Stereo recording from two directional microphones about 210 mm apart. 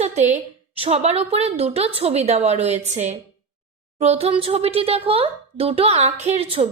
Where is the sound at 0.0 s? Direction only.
30° right (ahead or behind).